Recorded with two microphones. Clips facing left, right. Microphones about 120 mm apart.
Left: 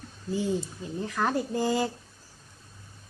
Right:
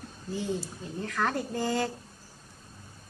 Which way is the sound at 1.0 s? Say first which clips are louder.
Left 2 dB; 10° left (ahead or behind).